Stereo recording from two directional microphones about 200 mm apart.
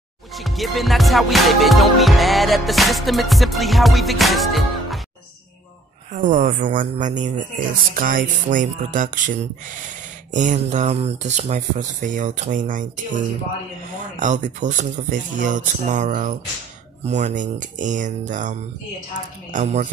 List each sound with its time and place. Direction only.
0.3 s music: centre (ahead or behind)
6.1 s speech: 40° right (ahead or behind)
14.2 s speech: 40° right (ahead or behind)